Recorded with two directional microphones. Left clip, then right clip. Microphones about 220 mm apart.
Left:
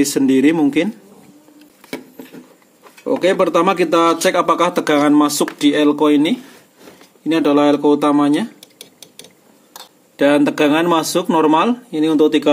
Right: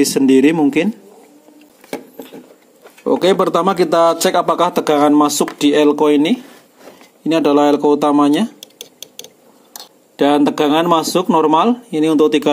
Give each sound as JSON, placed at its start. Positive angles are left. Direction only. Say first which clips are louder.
{"t": 0.0, "sound": "speech", "louder": "right 2 dB", "side_deg": -20}
{"t": 3.0, "sound": "speech", "louder": "right 2 dB", "side_deg": -25}
{"t": 10.1, "sound": "speech", "louder": "even", "side_deg": -20}